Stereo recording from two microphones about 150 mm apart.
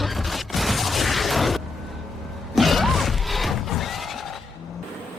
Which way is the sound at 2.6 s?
Centre (ahead or behind).